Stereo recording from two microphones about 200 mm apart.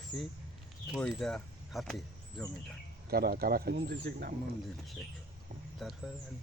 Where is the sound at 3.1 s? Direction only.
50° right (ahead or behind).